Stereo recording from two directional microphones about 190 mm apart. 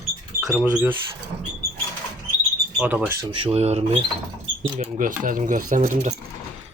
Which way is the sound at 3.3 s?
30° right (ahead or behind).